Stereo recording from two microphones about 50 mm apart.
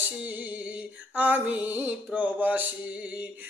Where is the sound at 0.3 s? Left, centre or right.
Right.